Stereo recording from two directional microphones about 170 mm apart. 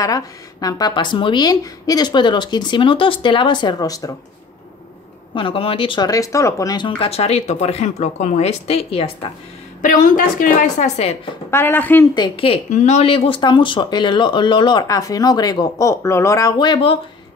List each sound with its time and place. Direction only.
0.0 s speech: 20° left (ahead or behind)
5.3 s speech: 30° left (ahead or behind)
9.8 s a woman's voice: 50° left (ahead or behind)
11.5 s speech: 15° left (ahead or behind)
12.2 s speech: 30° left (ahead or behind)